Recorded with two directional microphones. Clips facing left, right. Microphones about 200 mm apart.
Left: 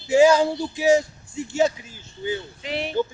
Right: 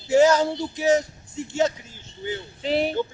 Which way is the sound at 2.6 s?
35° right (ahead or behind).